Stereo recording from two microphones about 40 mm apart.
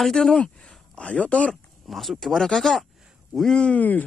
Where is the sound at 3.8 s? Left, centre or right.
Left.